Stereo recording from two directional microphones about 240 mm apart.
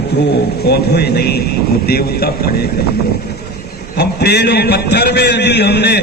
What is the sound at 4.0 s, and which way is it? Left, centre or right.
A man's voice, left.